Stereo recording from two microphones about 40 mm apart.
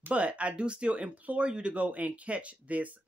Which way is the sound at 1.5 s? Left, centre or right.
Right.